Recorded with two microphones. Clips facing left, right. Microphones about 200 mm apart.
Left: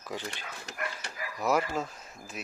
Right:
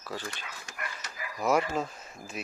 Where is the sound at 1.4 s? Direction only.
Centre (ahead or behind).